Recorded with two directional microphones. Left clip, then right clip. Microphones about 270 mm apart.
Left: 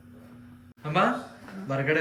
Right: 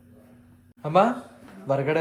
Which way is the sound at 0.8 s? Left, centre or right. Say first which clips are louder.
Right 4 dB; centre.